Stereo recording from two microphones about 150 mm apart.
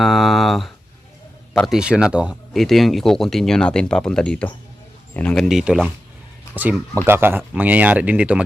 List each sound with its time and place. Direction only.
0.0 s a sound: centre (ahead or behind)
1.5 s speech: centre (ahead or behind)
6.6 s speech: 15° right (ahead or behind)